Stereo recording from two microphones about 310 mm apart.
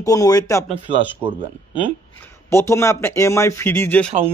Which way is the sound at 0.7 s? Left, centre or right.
Centre.